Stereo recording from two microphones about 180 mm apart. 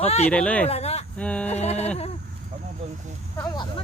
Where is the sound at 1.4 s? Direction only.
35° left (ahead or behind).